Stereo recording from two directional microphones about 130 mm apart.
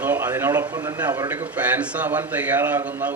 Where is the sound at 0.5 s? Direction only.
30° right (ahead or behind).